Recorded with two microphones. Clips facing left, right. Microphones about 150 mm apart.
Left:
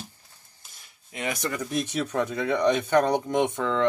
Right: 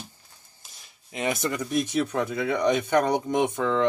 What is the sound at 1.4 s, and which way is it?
Speech, 15° right (ahead or behind).